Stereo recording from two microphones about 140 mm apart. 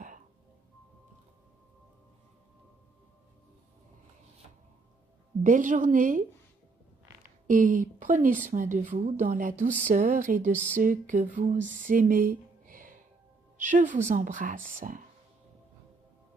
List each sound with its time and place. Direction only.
5.4 s a woman's voice: 65° right (ahead or behind)
7.4 s a woman's voice: 70° right (ahead or behind)
12.6 s music: 80° right
13.6 s a woman's voice: 65° right (ahead or behind)